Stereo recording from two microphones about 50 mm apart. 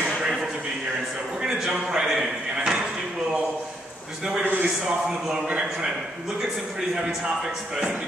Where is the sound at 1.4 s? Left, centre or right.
Centre.